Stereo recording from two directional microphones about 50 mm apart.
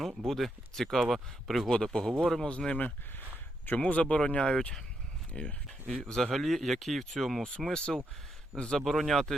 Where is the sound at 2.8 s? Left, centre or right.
Left; by 7.4 s centre.